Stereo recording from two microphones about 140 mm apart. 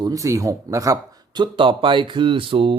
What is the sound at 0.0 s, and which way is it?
A man's voice, 25° right (ahead or behind).